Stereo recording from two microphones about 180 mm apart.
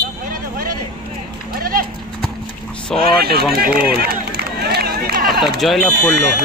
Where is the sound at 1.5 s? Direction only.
55° right (ahead or behind).